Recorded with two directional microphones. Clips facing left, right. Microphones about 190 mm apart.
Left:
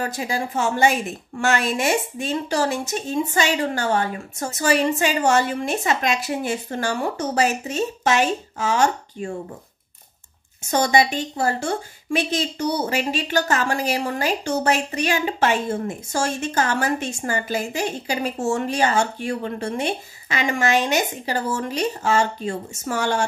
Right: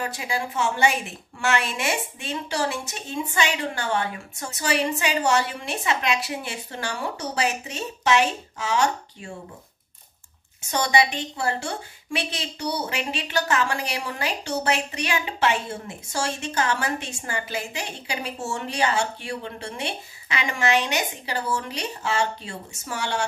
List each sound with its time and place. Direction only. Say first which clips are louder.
0.0 s a woman's voice: left 3 dB; 40° left (ahead or behind)
10.7 s a woman's voice: left 4 dB; 45° left (ahead or behind)